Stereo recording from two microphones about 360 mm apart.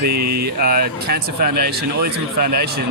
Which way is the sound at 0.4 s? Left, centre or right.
Right.